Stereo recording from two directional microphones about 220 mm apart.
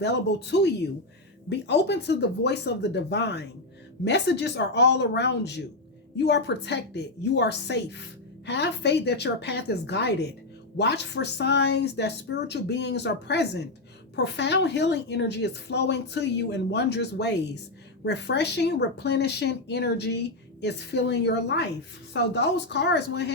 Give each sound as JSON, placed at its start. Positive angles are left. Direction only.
{"t": 0.0, "sound": "a woman's voice", "side_deg": 50}